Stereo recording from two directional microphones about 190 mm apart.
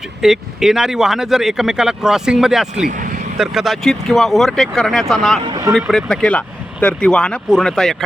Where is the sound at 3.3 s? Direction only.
Centre (ahead or behind).